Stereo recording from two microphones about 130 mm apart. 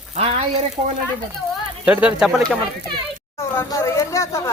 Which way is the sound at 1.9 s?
10° right (ahead or behind).